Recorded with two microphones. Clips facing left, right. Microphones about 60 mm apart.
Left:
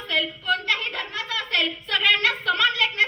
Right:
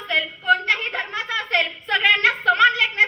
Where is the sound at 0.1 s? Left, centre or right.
Right.